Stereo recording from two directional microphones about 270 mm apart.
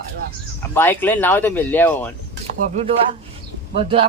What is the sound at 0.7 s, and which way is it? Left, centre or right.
Speech, centre.